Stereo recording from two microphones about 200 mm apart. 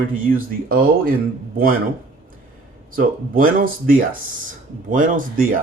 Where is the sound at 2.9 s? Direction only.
45° right (ahead or behind).